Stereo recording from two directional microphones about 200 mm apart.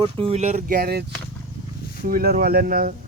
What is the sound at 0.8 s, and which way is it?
Speech, 50° right (ahead or behind).